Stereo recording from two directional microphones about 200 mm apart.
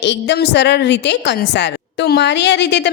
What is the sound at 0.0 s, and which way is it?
A woman's voice, 60° left (ahead or behind).